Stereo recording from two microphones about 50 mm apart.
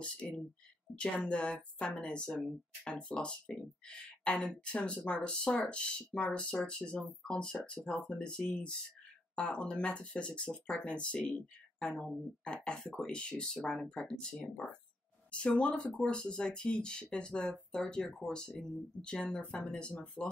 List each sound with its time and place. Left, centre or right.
0.0 s speech: left
0.9 s a woman's voice: right
1.3 s speech: left